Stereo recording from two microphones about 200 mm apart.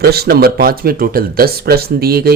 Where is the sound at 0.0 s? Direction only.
50° right (ahead or behind).